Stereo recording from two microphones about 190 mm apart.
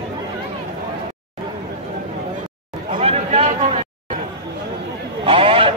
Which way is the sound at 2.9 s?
30° right (ahead or behind).